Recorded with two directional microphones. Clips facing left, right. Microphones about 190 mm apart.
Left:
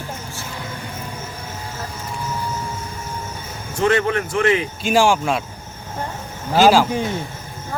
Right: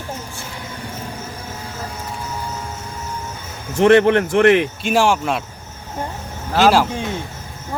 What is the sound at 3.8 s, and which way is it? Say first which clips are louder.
Speech: right 6 dB; 65° right (ahead or behind).